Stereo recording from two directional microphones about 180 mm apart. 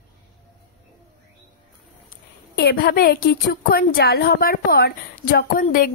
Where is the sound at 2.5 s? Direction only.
60° left (ahead or behind).